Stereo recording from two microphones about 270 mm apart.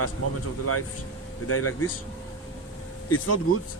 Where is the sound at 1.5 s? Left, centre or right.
Left.